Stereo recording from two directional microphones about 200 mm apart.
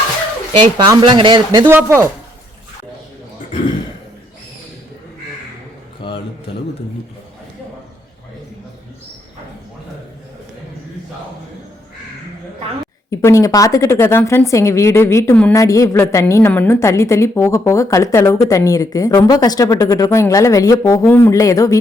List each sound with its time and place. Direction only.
0.8 s speech: 25° right (ahead or behind)
1.6 s speech: 10° right (ahead or behind)
6.0 s a sound: 25° left (ahead or behind)
13.1 s speech: 15° left (ahead or behind)